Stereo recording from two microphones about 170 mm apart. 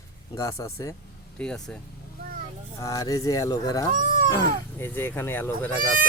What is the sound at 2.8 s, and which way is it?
Speech, 20° left (ahead or behind).